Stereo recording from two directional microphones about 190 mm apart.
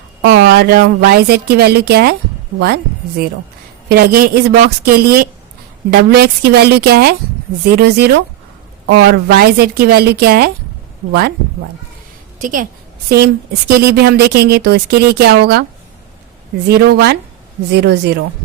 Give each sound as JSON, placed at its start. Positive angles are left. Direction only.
{"t": 0.2, "sound": "speech", "side_deg": -65}
{"t": 3.8, "sound": "a woman's voice", "side_deg": -55}
{"t": 12.4, "sound": "a woman's voice", "side_deg": -45}
{"t": 13.1, "sound": "speech", "side_deg": -60}
{"t": 16.6, "sound": "speech", "side_deg": -60}